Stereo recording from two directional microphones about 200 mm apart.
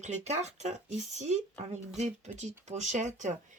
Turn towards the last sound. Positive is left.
turn(degrees=-35)  # may be behind; listen again after turning